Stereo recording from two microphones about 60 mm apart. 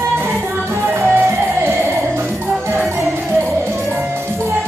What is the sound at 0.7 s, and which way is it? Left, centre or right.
Music, right.